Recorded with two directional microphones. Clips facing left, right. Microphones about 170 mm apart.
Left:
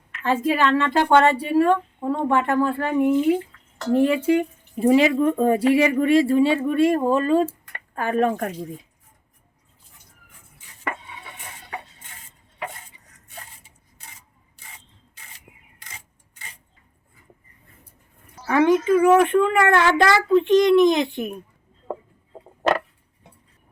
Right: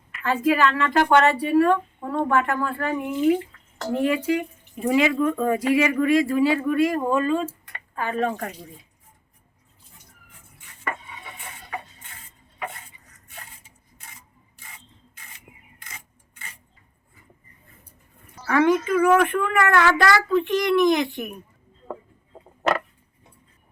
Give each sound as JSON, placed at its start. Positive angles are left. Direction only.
{"t": 0.2, "sound": "a child's voice", "side_deg": 30}
{"t": 4.0, "sound": "a child's voice", "side_deg": 30}
{"t": 7.9, "sound": "speech", "side_deg": 45}
{"t": 18.4, "sound": "a child's voice", "side_deg": 20}